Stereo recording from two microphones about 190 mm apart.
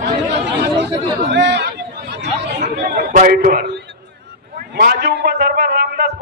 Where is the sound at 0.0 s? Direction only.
65° right (ahead or behind).